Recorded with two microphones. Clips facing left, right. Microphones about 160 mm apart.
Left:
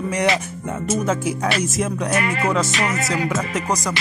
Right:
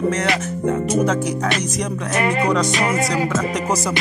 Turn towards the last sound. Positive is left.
turn(degrees=0)  # may be behind; listen again after turning